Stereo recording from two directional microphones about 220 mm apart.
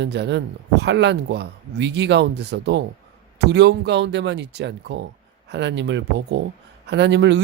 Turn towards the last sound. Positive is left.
turn(degrees=-50)  # may be behind; listen again after turning